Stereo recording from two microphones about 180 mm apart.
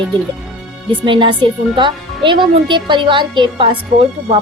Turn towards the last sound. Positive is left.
turn(degrees=-30)  # may be behind; listen again after turning